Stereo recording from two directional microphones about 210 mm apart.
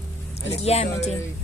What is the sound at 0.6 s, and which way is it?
Speech, 30° left (ahead or behind).